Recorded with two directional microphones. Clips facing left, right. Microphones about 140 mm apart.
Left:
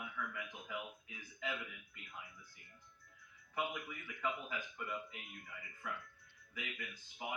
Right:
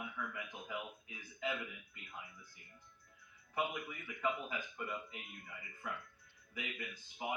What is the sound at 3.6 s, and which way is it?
Speech, 20° right (ahead or behind).